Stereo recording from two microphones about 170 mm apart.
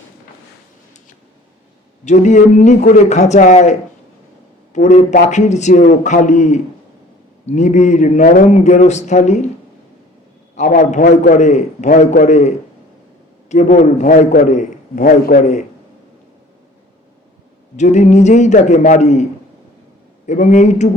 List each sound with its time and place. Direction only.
2.0 s a man's voice: 45° left (ahead or behind)
10.6 s a man's voice: 45° left (ahead or behind)
17.7 s a man's voice: 45° left (ahead or behind)
20.2 s a man's voice: 45° left (ahead or behind)